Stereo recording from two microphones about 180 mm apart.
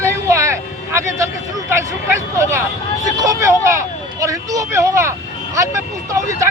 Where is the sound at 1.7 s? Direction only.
15° right (ahead or behind).